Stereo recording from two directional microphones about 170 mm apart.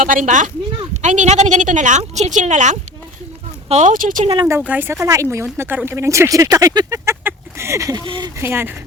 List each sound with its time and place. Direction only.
0.0 s speech: 50° right (ahead or behind)
4.7 s speech: 15° right (ahead or behind)
8.4 s speech: 15° right (ahead or behind)